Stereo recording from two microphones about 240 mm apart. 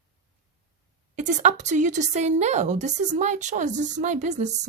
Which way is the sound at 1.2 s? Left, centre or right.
Right.